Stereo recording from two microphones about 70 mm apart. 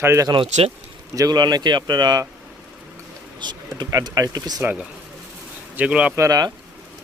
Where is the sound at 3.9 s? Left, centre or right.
Right.